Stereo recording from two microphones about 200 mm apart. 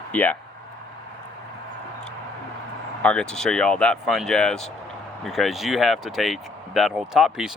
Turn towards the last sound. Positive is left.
turn(degrees=0)  # may be behind; listen again after turning